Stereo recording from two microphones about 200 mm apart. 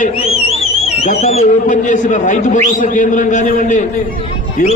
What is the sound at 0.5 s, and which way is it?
A man's voice, 30° left (ahead or behind).